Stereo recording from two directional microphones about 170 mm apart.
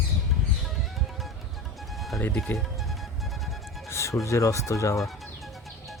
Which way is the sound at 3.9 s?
15° left (ahead or behind).